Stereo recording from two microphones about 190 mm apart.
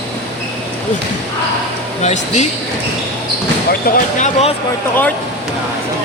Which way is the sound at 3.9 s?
50° left (ahead or behind).